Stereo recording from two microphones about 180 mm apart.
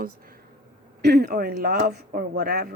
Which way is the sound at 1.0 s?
65° right (ahead or behind).